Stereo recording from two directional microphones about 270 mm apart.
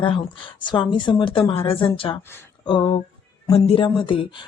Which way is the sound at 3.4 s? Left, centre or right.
Left.